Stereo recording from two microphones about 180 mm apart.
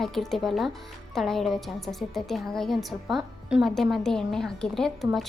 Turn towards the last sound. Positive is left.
turn(degrees=0)  # may be behind; listen again after turning